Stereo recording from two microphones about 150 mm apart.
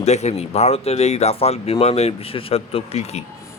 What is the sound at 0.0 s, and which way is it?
Speech, 45° left (ahead or behind).